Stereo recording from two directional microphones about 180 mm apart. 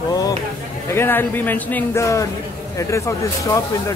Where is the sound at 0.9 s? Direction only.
10° left (ahead or behind).